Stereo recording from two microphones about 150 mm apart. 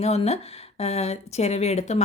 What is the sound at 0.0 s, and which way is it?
A woman's voice, 45° left (ahead or behind).